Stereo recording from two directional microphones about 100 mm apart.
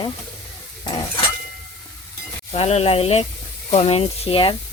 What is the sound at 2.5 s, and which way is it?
Speech, 90° left.